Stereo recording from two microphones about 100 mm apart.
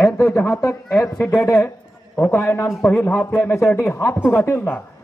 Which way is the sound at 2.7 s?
Centre (ahead or behind).